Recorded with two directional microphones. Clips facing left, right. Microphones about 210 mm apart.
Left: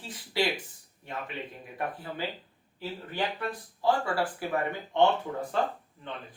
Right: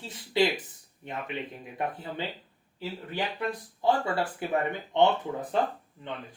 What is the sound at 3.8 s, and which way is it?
Speech, 20° right (ahead or behind).